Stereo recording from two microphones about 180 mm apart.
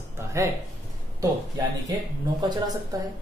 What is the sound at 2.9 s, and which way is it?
Speech, 20° right (ahead or behind).